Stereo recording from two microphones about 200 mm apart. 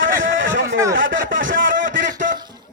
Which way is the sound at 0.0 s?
70° right (ahead or behind).